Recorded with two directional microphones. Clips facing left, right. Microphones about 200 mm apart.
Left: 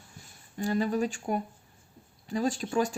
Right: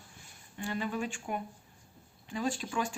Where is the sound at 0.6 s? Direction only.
40° left (ahead or behind).